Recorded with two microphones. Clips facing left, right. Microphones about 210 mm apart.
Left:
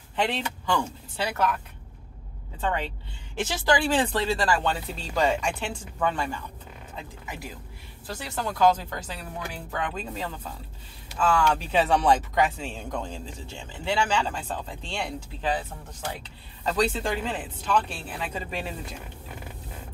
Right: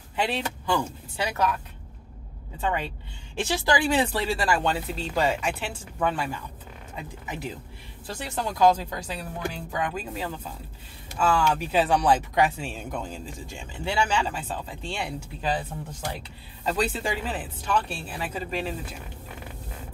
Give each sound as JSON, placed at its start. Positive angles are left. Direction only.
{"t": 0.1, "sound": "a man's voice", "side_deg": -10}
{"t": 2.6, "sound": "a man's voice", "side_deg": -10}
{"t": 7.0, "sound": "a man's voice", "side_deg": -20}
{"t": 16.6, "sound": "a man's voice", "side_deg": -5}